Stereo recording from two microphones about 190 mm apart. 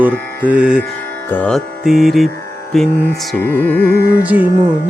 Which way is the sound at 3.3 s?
10° left (ahead or behind).